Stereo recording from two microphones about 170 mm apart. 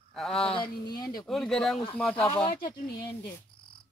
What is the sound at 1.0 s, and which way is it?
Speech, 25° left (ahead or behind).